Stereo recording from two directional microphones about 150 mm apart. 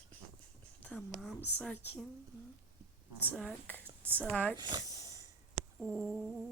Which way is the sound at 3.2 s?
5° left (ahead or behind).